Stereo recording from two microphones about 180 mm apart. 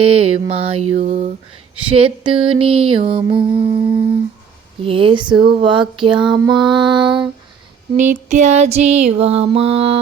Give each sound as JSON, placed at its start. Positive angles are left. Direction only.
{"t": 0.0, "sound": "music", "side_deg": -30}
{"t": 1.7, "sound": "a sound", "side_deg": -30}
{"t": 8.0, "sound": "music", "side_deg": -40}